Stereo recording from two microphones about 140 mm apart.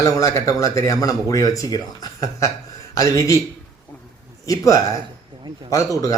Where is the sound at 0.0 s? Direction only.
20° left (ahead or behind).